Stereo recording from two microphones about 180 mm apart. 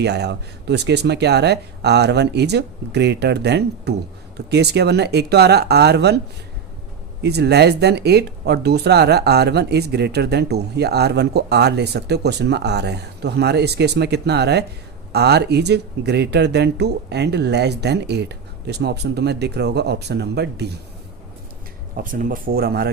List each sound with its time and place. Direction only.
0.0 s speech: 70° right (ahead or behind)
7.2 s speech: 65° right (ahead or behind)
21.9 s speech: 50° right (ahead or behind)